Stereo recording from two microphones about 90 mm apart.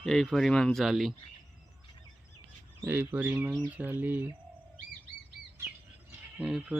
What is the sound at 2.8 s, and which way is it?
Speech, 25° right (ahead or behind).